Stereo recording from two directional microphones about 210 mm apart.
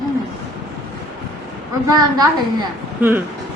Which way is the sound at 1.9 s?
20° right (ahead or behind).